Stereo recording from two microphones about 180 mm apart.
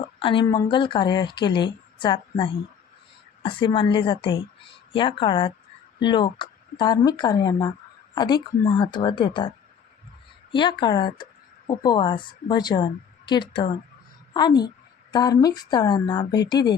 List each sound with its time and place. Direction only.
0.0 s a sound: 30° left (ahead or behind)
0.4 s a woman's voice: 20° left (ahead or behind)
10.5 s a woman's voice: 25° left (ahead or behind)